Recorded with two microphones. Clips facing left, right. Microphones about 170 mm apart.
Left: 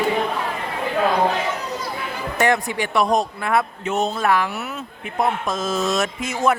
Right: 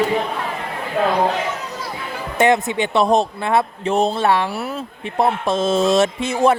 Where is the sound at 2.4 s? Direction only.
20° right (ahead or behind).